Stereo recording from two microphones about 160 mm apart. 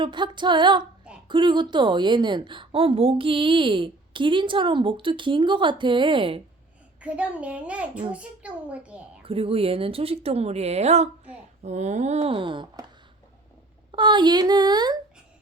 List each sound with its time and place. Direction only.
0.0 s a woman's voice: 30° right (ahead or behind)
7.0 s a child's voice: 10° right (ahead or behind)
9.2 s a woman's voice: 35° right (ahead or behind)
13.9 s a woman's voice: 30° right (ahead or behind)